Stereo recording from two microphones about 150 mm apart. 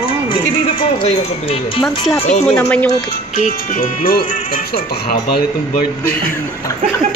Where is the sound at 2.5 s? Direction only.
10° left (ahead or behind).